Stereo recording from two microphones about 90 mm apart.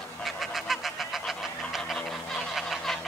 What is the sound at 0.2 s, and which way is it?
Quack, centre (ahead or behind).